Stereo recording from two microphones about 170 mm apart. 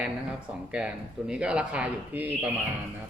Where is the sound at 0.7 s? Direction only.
5° right (ahead or behind).